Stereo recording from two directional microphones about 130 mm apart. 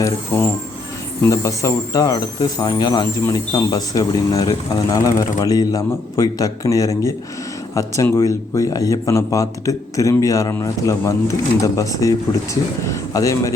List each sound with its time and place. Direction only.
0.3 s speech: 20° left (ahead or behind)